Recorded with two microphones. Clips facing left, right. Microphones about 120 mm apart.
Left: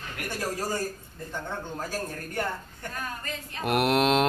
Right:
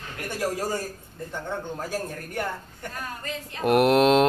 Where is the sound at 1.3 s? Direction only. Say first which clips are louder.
Right 2 dB; 10° right (ahead or behind).